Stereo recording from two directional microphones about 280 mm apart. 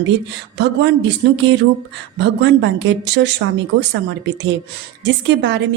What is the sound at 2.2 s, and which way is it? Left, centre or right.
A woman's voice, right.